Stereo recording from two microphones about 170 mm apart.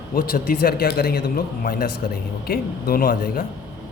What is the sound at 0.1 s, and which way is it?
Speech, 60° left (ahead or behind).